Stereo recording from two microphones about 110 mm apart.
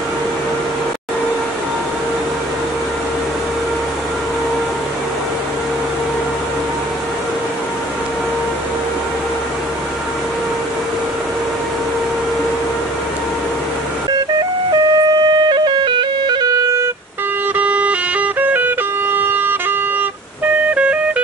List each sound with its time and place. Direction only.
14.7 s music: 40° right (ahead or behind)
17.6 s music: 15° right (ahead or behind)
20.7 s music: 10° right (ahead or behind)